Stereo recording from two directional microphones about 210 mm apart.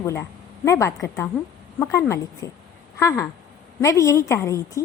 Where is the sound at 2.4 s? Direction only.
15° left (ahead or behind).